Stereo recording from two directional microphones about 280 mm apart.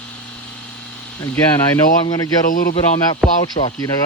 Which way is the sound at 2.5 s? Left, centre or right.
Left.